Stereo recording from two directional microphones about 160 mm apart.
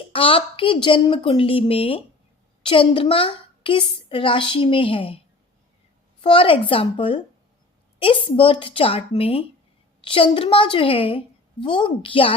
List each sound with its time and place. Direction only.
0.1 s a woman's voice: 35° left (ahead or behind)
6.2 s a woman's voice: 35° left (ahead or behind)